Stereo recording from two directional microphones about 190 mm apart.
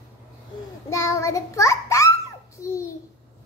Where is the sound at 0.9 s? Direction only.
15° left (ahead or behind).